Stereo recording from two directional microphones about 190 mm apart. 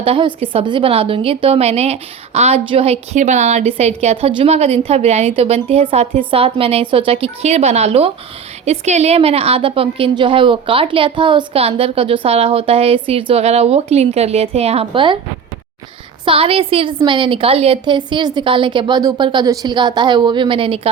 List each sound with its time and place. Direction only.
0.0 s a woman's voice: 30° right (ahead or behind)
16.2 s a woman's voice: 30° right (ahead or behind)